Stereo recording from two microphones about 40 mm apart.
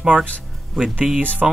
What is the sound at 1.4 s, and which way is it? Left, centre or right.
Speech, centre.